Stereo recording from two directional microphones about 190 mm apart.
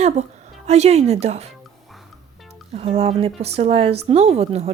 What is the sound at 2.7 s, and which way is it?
A woman's voice, 30° right (ahead or behind).